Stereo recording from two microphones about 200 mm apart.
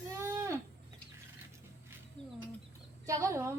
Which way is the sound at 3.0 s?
15° right (ahead or behind).